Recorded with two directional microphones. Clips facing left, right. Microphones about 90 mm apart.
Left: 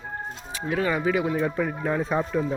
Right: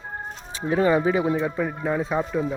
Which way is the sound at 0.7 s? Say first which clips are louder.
Right 4 dB; 30° right (ahead or behind).